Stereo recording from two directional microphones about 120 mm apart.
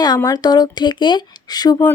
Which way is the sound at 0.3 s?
35° left (ahead or behind).